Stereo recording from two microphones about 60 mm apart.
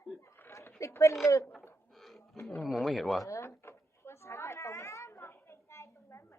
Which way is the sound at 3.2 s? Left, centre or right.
Left.